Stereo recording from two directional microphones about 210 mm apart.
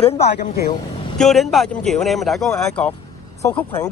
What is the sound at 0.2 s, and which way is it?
Speech, 50° left (ahead or behind).